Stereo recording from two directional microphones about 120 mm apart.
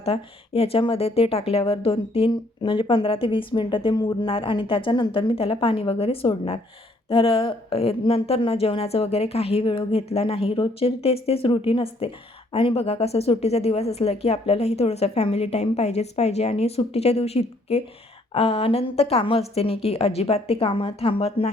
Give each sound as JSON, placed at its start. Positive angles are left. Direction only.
{"t": 0.0, "sound": "a woman's voice", "side_deg": 55}